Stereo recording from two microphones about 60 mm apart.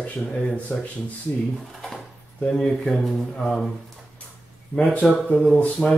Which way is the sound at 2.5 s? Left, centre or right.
Centre.